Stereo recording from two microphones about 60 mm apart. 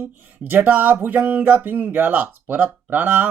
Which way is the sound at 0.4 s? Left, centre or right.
Right.